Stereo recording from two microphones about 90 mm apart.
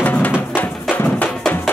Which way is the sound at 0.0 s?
20° left (ahead or behind).